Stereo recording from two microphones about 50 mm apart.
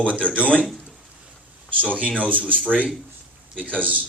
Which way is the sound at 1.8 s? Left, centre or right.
Right.